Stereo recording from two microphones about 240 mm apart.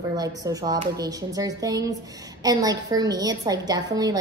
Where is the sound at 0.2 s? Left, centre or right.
Centre.